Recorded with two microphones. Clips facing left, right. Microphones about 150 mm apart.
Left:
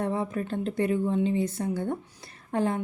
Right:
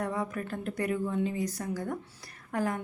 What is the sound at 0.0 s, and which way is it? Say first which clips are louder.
A woman's voice: left 4 dB; 25° left (ahead or behind).